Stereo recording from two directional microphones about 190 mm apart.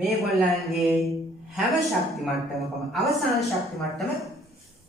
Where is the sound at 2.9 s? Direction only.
Centre (ahead or behind).